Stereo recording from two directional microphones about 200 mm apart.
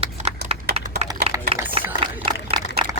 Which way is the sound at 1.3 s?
30° right (ahead or behind).